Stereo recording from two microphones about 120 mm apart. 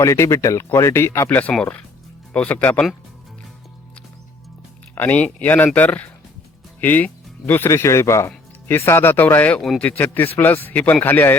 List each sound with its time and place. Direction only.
0.0 s speech: 25° left (ahead or behind)
4.9 s speech: 15° left (ahead or behind)
9.6 s speech: centre (ahead or behind)
10.3 s speech: 15° left (ahead or behind)